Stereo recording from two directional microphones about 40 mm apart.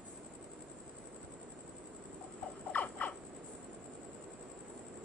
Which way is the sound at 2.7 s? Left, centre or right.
Left.